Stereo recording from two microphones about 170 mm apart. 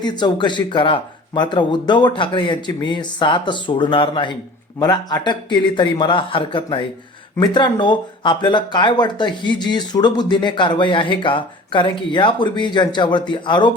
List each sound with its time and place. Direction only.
0.0 s speech: 25° left (ahead or behind)